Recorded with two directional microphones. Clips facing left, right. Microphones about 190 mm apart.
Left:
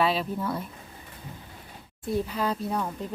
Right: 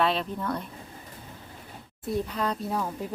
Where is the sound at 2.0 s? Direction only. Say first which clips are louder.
Left 1 dB; centre (ahead or behind).